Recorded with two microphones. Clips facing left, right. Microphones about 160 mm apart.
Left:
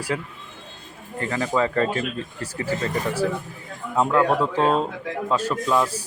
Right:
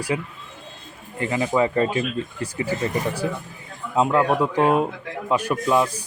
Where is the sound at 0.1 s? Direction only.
15° right (ahead or behind).